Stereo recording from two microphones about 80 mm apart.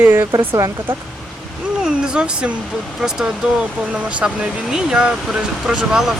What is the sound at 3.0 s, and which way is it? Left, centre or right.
Speech, centre.